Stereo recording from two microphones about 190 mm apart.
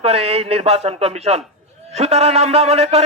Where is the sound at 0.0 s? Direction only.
35° right (ahead or behind).